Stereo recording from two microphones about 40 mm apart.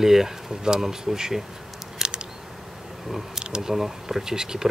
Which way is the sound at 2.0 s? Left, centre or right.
Right.